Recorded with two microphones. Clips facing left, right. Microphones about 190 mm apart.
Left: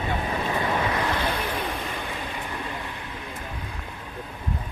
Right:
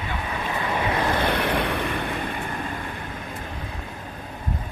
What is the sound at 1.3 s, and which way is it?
Vehicle, 65° right (ahead or behind).